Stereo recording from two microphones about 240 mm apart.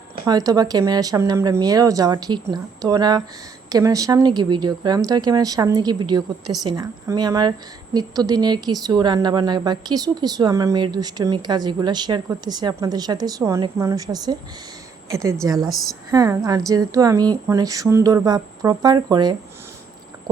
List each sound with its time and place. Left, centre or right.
0.3 s a woman's voice: centre
15.7 s speech: centre
16.1 s a woman's voice: centre
20.3 s a sound: centre